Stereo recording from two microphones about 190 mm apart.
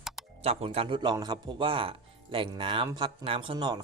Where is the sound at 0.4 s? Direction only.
30° right (ahead or behind).